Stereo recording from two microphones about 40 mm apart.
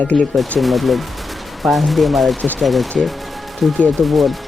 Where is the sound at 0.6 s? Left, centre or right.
Centre.